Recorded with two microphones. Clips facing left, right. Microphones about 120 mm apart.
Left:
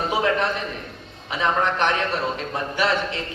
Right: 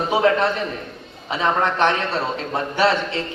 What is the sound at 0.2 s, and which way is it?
A man's voice, 35° right (ahead or behind).